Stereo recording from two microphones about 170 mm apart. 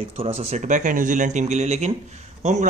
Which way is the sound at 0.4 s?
40° right (ahead or behind).